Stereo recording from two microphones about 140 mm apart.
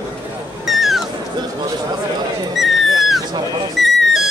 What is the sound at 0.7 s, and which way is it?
Cat, centre (ahead or behind).